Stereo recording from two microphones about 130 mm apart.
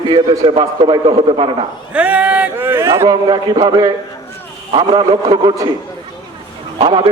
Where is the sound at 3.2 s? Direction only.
35° right (ahead or behind).